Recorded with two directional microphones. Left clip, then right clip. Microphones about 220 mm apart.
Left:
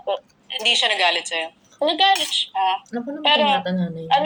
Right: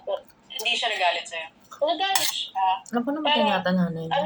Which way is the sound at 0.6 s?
55° left (ahead or behind).